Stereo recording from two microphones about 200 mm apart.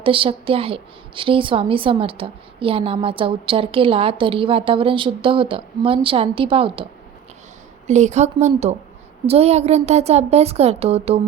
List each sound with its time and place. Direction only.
0.0 s a woman's voice: 25° right (ahead or behind)
7.9 s a woman's voice: 35° right (ahead or behind)